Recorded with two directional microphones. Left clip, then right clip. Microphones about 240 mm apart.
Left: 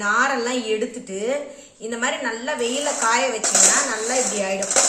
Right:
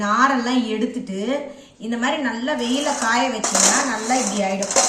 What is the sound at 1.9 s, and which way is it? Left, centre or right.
Speech, centre.